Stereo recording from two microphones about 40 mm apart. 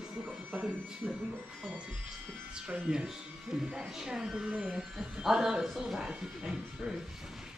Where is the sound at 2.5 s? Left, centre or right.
Right.